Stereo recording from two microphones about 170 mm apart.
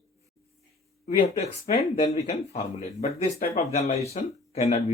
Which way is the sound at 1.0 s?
40° left (ahead or behind).